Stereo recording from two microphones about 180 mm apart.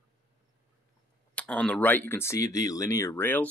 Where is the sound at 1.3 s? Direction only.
5° left (ahead or behind).